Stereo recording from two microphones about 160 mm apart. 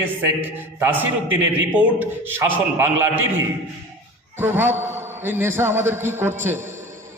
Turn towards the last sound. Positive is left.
turn(degrees=-15)  # may be behind; listen again after turning